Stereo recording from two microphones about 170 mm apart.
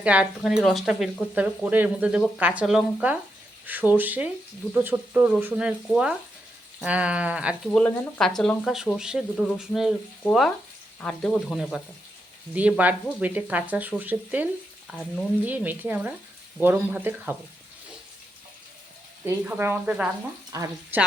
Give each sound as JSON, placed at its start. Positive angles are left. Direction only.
{"t": 0.0, "sound": "speech", "side_deg": -5}
{"t": 3.7, "sound": "frying", "side_deg": -10}
{"t": 7.7, "sound": "speech", "side_deg": 10}
{"t": 11.0, "sound": "speech", "side_deg": 5}
{"t": 12.5, "sound": "frying", "side_deg": -10}
{"t": 14.8, "sound": "frying", "side_deg": 5}
{"t": 15.4, "sound": "frying", "side_deg": -10}
{"t": 19.2, "sound": "frying", "side_deg": -10}
{"t": 20.5, "sound": "speech", "side_deg": -20}